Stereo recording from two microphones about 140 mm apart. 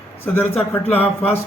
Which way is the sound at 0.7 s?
15° left (ahead or behind).